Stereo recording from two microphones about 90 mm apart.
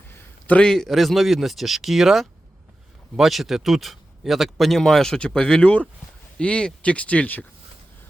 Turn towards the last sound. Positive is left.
turn(degrees=15)  # may be behind; listen again after turning